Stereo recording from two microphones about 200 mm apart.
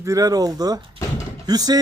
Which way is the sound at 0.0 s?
15° right (ahead or behind).